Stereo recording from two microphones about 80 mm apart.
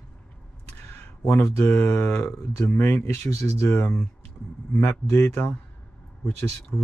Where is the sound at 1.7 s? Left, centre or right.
Centre.